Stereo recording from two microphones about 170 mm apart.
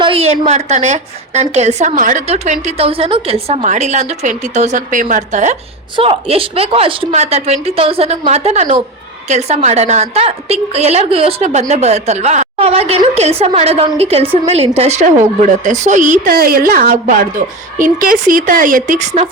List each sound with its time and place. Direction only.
0.0 s a woman's voice: 35° right (ahead or behind)
16.3 s a woman's voice: 65° right (ahead or behind); by 19.3 s 40° right (ahead or behind)